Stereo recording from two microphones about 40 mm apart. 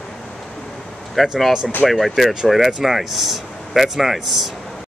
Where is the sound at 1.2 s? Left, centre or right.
Centre.